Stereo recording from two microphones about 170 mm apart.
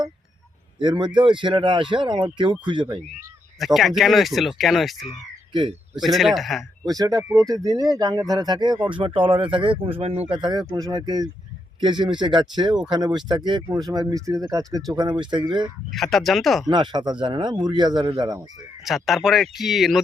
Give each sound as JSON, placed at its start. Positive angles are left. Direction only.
{"t": 0.8, "sound": "speech", "side_deg": -30}
{"t": 3.6, "sound": "speech", "side_deg": 0}
{"t": 6.8, "sound": "speech", "side_deg": -20}
{"t": 15.9, "sound": "speech", "side_deg": 0}
{"t": 16.6, "sound": "speech", "side_deg": -25}
{"t": 18.9, "sound": "speech", "side_deg": 0}